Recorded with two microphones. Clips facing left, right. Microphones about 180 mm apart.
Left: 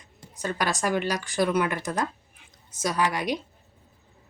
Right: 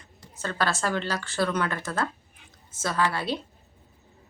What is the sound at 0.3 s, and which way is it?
A woman's voice, 15° left (ahead or behind).